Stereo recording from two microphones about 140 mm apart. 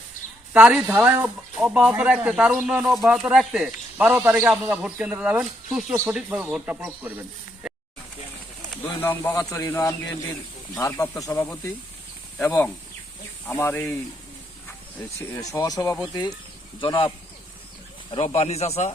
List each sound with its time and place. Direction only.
0.5 s speech: 10° right (ahead or behind)
9.0 s speech: 15° left (ahead or behind); by 17.1 s 35° left (ahead or behind)
18.1 s speech: 45° left (ahead or behind)